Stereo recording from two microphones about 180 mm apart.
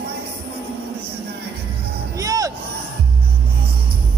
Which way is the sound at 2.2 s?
20° right (ahead or behind).